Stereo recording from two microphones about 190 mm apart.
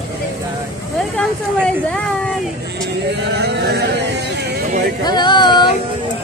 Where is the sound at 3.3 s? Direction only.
60° right (ahead or behind).